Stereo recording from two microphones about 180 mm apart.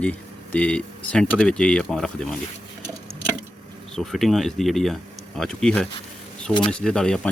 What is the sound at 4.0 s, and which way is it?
Speech, centre (ahead or behind).